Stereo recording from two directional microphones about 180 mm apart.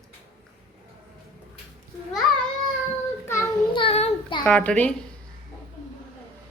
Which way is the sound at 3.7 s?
30° left (ahead or behind).